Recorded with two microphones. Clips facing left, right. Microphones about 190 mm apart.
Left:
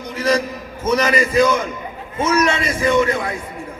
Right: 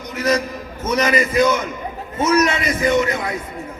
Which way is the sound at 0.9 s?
25° right (ahead or behind).